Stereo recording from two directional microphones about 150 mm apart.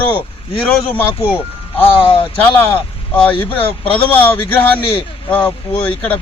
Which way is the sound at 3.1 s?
10° left (ahead or behind).